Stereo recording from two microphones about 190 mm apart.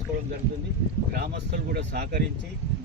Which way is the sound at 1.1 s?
60° right (ahead or behind).